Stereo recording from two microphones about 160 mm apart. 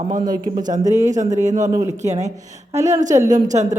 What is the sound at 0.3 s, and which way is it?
Speech, 25° right (ahead or behind).